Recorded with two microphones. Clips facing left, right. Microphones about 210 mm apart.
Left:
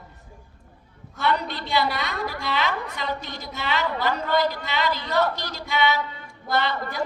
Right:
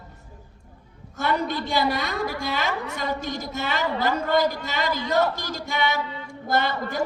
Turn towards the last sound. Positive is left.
turn(degrees=-45)  # may be behind; listen again after turning